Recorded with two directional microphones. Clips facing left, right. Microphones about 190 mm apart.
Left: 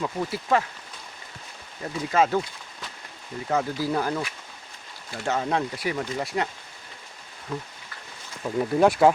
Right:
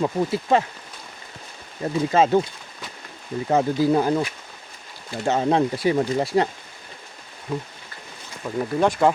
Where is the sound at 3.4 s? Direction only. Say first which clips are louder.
Right 6 dB; 25° right (ahead or behind).